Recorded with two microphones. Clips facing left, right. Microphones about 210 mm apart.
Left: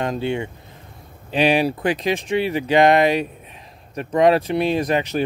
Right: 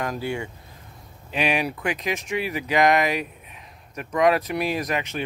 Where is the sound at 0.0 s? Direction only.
25° left (ahead or behind).